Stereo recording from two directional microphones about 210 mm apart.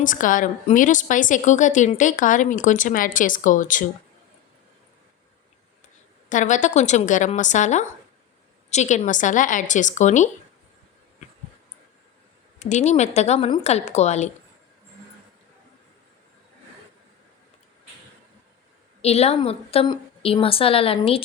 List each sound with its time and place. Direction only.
0.0 s a woman's voice: 40° left (ahead or behind)
6.2 s a woman's voice: 35° left (ahead or behind)
12.5 s a woman's voice: 35° left (ahead or behind)
19.0 s a woman's voice: 30° left (ahead or behind)